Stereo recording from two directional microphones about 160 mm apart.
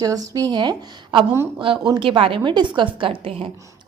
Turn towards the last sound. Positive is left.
turn(degrees=-35)  # may be behind; listen again after turning